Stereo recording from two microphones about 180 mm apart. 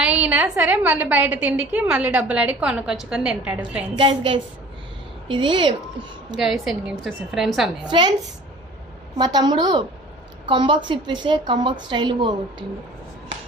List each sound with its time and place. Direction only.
0.0 s a woman's voice: 5° right (ahead or behind)
5.3 s a woman's voice: 25° right (ahead or behind)
6.3 s a woman's voice: centre (ahead or behind)
7.9 s a woman's voice: 25° right (ahead or behind)
9.1 s a woman's voice: 25° right (ahead or behind)